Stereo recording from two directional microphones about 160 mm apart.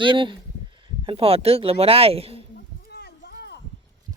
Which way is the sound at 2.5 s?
90° left.